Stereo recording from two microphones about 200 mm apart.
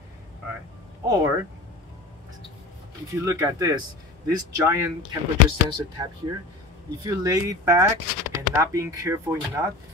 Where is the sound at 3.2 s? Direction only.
15° right (ahead or behind).